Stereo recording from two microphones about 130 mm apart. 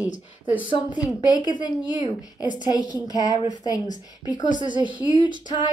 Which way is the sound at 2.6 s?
30° left (ahead or behind).